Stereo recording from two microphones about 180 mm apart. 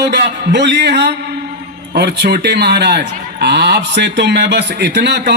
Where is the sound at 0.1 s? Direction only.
70° right (ahead or behind).